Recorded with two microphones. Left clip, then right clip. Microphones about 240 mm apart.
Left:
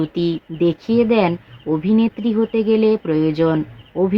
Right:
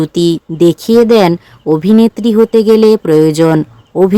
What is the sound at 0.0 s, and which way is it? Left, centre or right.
Speech, right.